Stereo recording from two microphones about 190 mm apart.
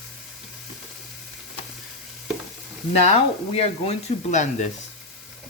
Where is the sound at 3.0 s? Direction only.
35° left (ahead or behind).